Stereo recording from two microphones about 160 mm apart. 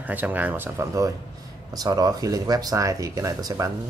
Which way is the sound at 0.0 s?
10° right (ahead or behind).